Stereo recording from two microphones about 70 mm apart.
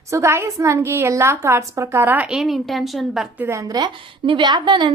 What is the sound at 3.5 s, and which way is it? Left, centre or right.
Speech, right.